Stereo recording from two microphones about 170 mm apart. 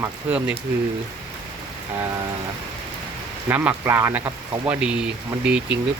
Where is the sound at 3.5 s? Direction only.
10° right (ahead or behind).